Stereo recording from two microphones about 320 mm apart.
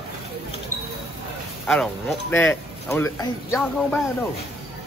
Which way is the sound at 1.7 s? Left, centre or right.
Centre.